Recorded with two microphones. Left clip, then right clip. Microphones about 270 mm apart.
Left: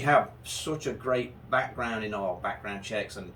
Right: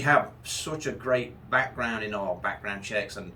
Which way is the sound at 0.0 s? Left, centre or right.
Centre.